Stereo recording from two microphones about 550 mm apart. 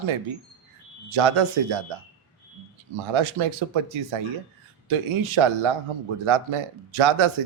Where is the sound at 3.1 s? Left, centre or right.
Right.